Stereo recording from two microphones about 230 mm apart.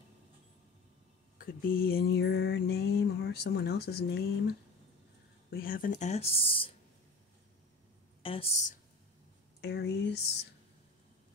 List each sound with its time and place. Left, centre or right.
1.4 s mantra: left
5.5 s speech: left
8.2 s speech: left
9.6 s mantra: left